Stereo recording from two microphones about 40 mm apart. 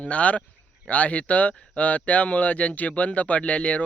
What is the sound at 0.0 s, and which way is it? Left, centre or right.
Speech, left.